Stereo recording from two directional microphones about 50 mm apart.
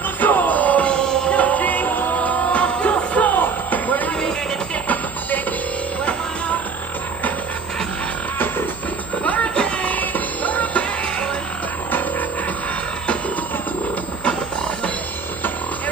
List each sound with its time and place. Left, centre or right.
0.2 s music: left
0.8 s music: centre
1.3 s music: left
9.2 s music: left
9.9 s music: left